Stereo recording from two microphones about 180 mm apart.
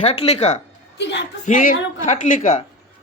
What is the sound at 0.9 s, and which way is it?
Speech, 75° left (ahead or behind).